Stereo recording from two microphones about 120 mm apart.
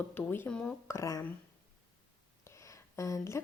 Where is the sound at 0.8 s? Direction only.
25° left (ahead or behind).